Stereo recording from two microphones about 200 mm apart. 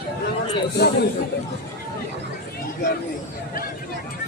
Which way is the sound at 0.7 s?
55° left (ahead or behind).